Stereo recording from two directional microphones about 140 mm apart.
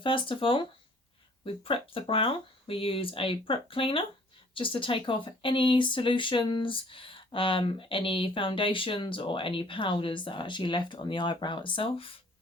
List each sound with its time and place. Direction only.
0.0 s speech: 35° left (ahead or behind)
1.6 s speech: 40° left (ahead or behind)